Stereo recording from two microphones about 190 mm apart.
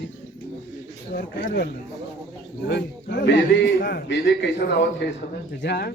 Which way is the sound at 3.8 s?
60° left (ahead or behind).